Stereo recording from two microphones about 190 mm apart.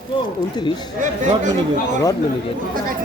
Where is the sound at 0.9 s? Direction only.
40° right (ahead or behind).